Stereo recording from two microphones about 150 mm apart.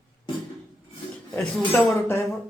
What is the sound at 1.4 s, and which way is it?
Speech, centre (ahead or behind).